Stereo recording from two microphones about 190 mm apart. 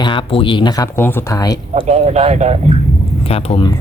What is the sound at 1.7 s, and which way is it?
Speech, 35° right (ahead or behind).